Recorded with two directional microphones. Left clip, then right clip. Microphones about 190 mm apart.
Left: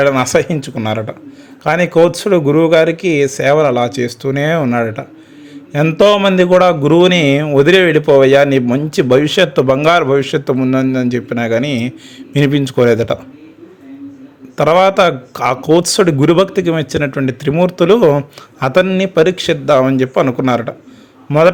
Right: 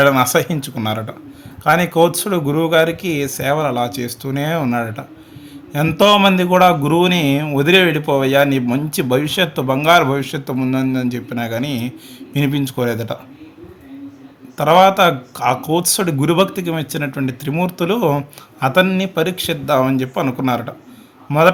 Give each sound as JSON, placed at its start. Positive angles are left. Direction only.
{"t": 0.0, "sound": "speech", "side_deg": 25}
{"t": 14.5, "sound": "a man's voice", "side_deg": 30}